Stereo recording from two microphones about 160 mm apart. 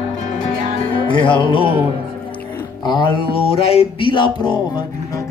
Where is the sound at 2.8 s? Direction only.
30° left (ahead or behind).